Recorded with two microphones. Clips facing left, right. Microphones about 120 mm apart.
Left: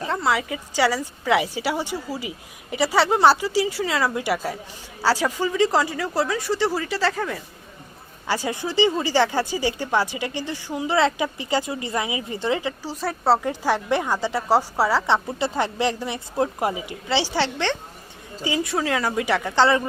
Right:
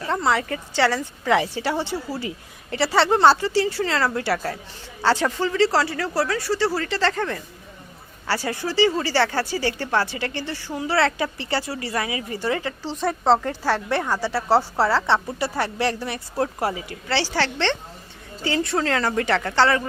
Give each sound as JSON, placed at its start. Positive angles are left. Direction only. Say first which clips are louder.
{"t": 0.1, "sound": "speech", "louder": "right 2 dB", "side_deg": 5}
{"t": 8.3, "sound": "speech", "louder": "even", "side_deg": 15}